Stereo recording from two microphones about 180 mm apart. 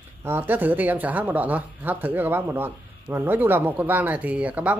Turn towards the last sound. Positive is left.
turn(degrees=-5)  # may be behind; listen again after turning